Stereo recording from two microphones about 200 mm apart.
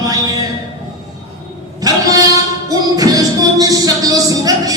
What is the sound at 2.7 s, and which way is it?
Music, 20° right (ahead or behind).